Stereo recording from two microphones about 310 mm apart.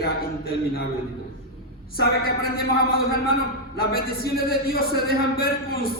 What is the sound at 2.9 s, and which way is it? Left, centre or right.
Speech, left.